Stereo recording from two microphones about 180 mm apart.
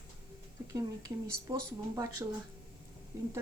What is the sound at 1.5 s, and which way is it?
Speech, 20° right (ahead or behind).